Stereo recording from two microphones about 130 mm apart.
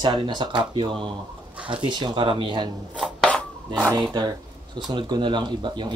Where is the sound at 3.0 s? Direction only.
5° left (ahead or behind).